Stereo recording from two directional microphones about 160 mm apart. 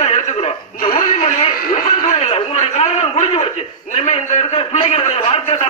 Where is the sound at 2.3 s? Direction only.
40° left (ahead or behind).